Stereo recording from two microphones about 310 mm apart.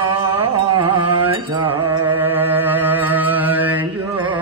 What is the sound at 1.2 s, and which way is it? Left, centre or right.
Mantra, centre.